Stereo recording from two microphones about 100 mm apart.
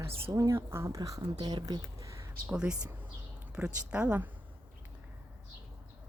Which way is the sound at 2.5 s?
10° right (ahead or behind).